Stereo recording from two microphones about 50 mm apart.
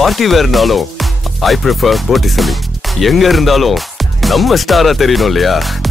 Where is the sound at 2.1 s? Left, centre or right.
Centre.